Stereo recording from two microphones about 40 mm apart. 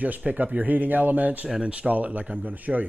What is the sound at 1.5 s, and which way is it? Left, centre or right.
Speech, right.